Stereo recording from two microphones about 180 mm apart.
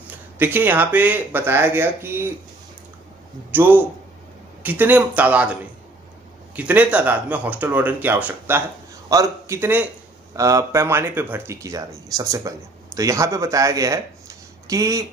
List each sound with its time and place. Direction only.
0.4 s speech: 10° right (ahead or behind)
3.5 s speech: 10° right (ahead or behind)